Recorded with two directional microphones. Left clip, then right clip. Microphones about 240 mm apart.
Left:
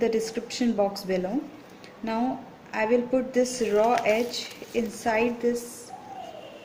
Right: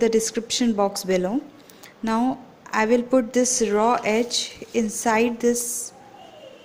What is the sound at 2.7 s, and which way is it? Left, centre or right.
Speech, right.